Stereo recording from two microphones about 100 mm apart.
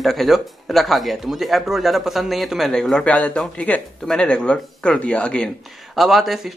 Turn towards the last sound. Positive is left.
turn(degrees=0)  # may be behind; listen again after turning